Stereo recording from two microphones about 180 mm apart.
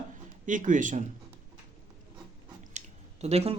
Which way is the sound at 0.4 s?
45° right (ahead or behind).